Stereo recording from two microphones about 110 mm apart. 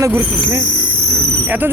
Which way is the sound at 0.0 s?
25° right (ahead or behind).